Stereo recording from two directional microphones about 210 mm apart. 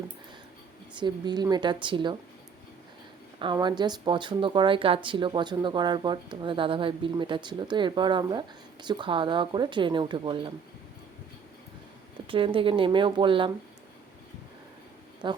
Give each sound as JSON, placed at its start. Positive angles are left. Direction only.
{"t": 0.9, "sound": "speech", "side_deg": -20}
{"t": 3.3, "sound": "speech", "side_deg": -20}
{"t": 12.3, "sound": "speech", "side_deg": -25}
{"t": 15.2, "sound": "speech", "side_deg": -20}